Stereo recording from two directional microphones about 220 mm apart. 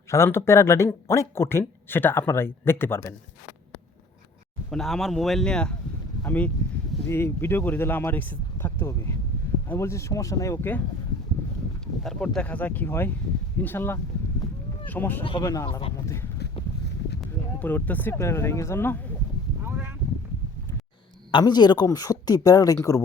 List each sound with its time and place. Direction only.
0.1 s speech: 10° left (ahead or behind)
4.7 s a man's voice: centre (ahead or behind)
12.0 s speech: centre (ahead or behind)
15.2 s speech: 20° left (ahead or behind)
16.6 s a sound: 25° left (ahead or behind)
17.2 s speech: 5° left (ahead or behind)
19.6 s a sound: 10° right (ahead or behind)
21.2 s speech: 20° left (ahead or behind)